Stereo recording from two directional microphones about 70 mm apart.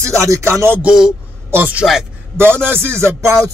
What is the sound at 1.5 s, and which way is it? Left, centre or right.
Speech, right.